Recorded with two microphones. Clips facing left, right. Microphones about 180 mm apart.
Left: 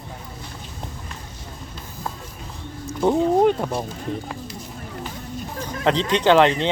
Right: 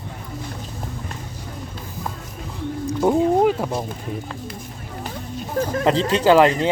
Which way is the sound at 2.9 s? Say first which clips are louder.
Right 1 dB; 15° right (ahead or behind).